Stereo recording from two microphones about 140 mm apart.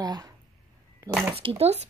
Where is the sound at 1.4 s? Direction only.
45° right (ahead or behind).